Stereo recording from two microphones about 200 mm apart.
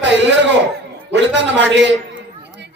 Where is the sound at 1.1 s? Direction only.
60° right (ahead or behind).